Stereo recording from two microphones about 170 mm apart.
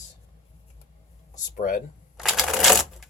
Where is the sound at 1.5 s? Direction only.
55° left (ahead or behind).